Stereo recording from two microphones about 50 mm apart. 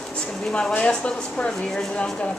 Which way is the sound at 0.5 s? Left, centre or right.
Centre.